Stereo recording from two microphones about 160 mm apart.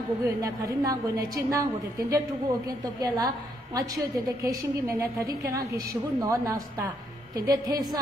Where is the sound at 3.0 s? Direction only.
25° right (ahead or behind).